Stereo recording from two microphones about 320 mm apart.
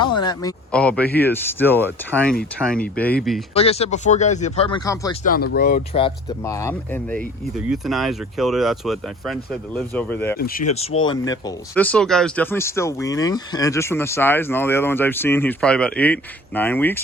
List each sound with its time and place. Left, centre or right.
0.2 s a sound: centre
0.7 s speech: centre
1.0 s speech: left
1.3 s speech: centre
3.5 s speech: centre
5.2 s speech: left
5.9 s speech: centre
10.3 s speech: left
11.0 s speech: centre